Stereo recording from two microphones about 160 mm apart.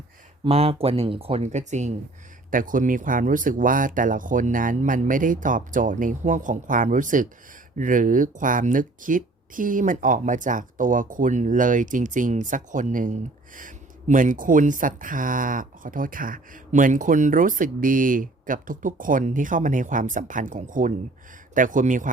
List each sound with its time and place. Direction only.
0.4 s speech: 35° right (ahead or behind)
2.5 s speech: 55° right (ahead or behind)